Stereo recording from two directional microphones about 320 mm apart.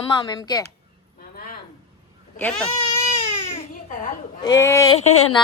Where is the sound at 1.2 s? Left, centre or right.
Left.